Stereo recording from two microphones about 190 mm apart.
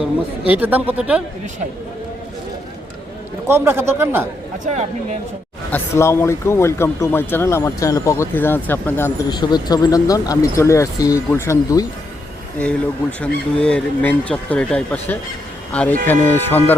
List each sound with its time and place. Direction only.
0.0 s speech: 5° right (ahead or behind)
3.4 s speech: 15° right (ahead or behind)
4.6 s speech: 35° right (ahead or behind)
5.7 s speech: 15° left (ahead or behind)
9.3 s speech: 20° left (ahead or behind)
12.5 s speech: 5° left (ahead or behind)